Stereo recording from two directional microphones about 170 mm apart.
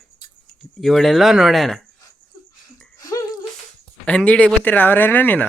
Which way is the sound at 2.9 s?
20° left (ahead or behind).